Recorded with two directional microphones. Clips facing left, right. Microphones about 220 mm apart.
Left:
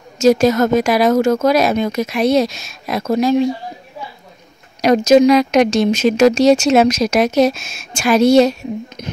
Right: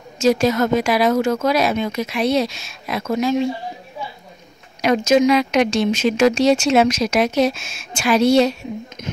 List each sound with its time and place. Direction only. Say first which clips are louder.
0.2 s speech: left 4 dB; 40° left (ahead or behind)
4.8 s speech: left 5 dB; 40° left (ahead or behind)